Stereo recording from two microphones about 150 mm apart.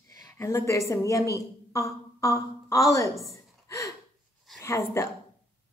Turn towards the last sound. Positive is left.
turn(degrees=20)  # may be behind; listen again after turning